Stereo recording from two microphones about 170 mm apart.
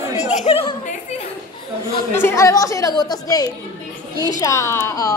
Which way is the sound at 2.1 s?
15° left (ahead or behind).